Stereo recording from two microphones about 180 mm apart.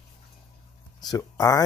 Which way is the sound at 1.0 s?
20° left (ahead or behind).